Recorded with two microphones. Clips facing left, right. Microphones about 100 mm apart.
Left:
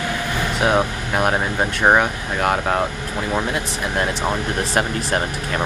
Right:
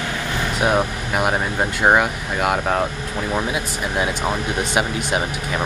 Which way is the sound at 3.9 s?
5° right (ahead or behind).